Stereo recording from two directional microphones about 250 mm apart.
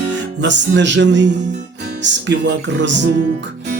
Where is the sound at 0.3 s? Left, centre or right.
Right.